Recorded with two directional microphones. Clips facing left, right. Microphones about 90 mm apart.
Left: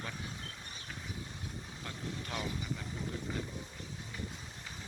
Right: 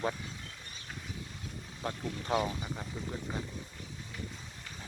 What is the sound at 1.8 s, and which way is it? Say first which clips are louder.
Speech: right 7 dB; 35° right (ahead or behind).